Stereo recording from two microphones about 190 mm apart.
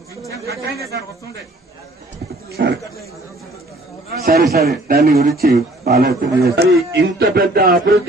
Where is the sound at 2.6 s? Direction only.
65° right (ahead or behind).